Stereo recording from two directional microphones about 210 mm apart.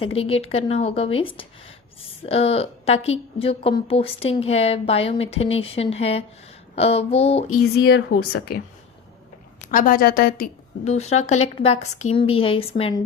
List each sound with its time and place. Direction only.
0.0 s a woman's voice: 25° left (ahead or behind)
7.5 s speech: 80° left
8.1 s speech: 50° left (ahead or behind)
9.7 s a woman's voice: 40° left (ahead or behind); by 13.0 s 25° left (ahead or behind)